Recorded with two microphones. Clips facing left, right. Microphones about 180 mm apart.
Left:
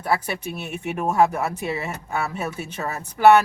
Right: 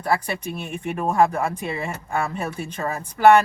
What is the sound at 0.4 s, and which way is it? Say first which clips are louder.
Speech: right 1 dB; 5° left (ahead or behind).